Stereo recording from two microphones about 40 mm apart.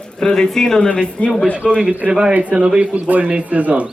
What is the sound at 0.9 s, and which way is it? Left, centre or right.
Speech, left.